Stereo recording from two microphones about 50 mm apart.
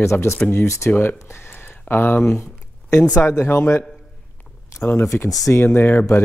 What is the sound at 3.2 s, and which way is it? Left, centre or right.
Speech, left.